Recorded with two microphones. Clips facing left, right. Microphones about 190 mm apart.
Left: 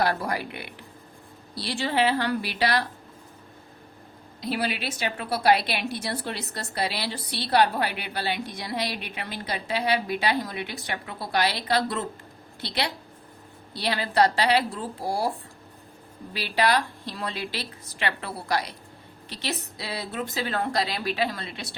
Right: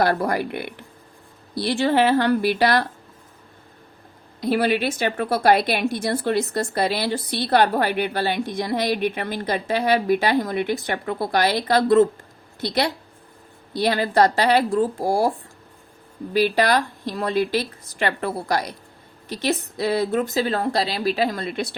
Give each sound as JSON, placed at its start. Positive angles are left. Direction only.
{"t": 0.0, "sound": "a woman's voice", "side_deg": -50}
{"t": 4.4, "sound": "a woman's voice", "side_deg": -50}
{"t": 16.3, "sound": "a woman's voice", "side_deg": -45}